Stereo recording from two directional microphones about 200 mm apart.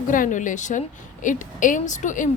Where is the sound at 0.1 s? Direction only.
40° left (ahead or behind).